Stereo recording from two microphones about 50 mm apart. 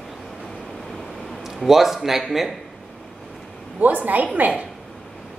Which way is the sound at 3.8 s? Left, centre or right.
Right.